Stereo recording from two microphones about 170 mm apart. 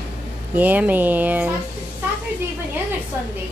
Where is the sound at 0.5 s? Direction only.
10° right (ahead or behind).